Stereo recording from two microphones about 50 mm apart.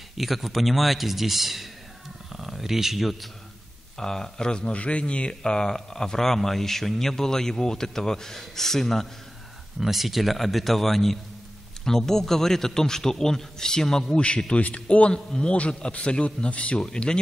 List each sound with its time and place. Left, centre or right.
0.2 s speech: centre
4.0 s speech: centre
9.8 s a man's voice: centre